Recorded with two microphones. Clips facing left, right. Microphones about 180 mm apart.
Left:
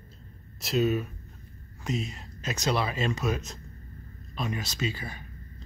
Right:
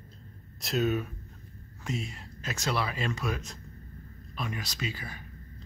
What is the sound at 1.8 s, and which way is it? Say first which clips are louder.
Speech: left 3 dB; 20° left (ahead or behind).